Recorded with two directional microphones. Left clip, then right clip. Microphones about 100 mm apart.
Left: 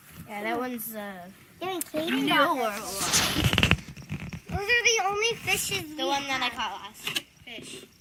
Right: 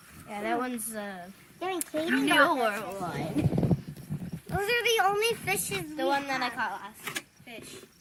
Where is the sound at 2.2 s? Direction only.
25° right (ahead or behind).